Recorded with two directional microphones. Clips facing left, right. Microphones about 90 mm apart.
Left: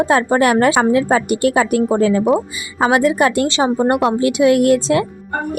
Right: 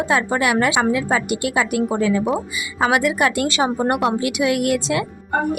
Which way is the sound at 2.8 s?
30° left (ahead or behind).